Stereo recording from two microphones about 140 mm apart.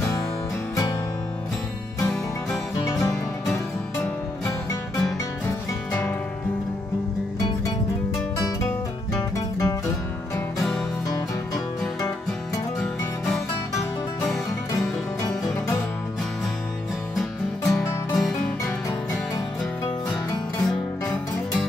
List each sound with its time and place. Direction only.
2.5 s music: centre (ahead or behind)
5.9 s music: 10° left (ahead or behind)
9.1 s music: 25° left (ahead or behind)
14.2 s music: centre (ahead or behind)
17.1 s music: centre (ahead or behind)
20.6 s music: 5° left (ahead or behind)